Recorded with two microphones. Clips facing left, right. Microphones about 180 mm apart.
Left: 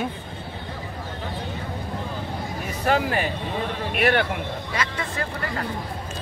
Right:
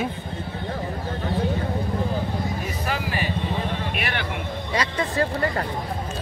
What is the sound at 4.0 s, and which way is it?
Speech, 50° left (ahead or behind).